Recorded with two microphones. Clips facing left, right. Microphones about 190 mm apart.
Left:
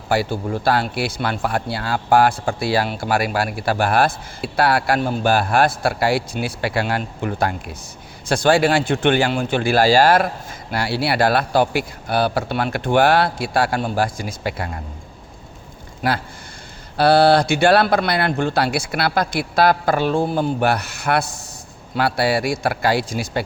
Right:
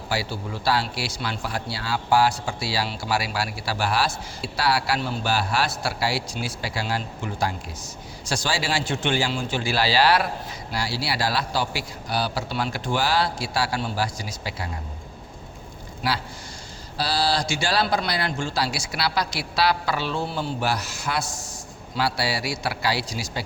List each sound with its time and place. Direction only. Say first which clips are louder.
0.1 s speech: left 9 dB; 50° left (ahead or behind)
10.7 s speech: left 7 dB; 60° left (ahead or behind)
16.0 s speech: left 5 dB; 50° left (ahead or behind)